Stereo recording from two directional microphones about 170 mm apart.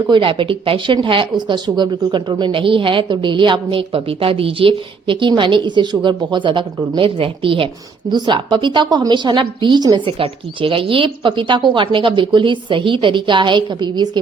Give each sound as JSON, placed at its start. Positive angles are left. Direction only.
{"t": 0.1, "sound": "a woman's voice", "side_deg": -30}